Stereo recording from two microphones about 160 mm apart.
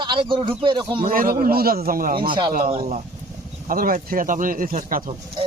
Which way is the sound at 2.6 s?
45° right (ahead or behind).